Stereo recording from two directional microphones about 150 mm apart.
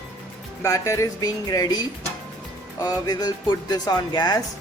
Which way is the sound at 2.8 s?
25° left (ahead or behind).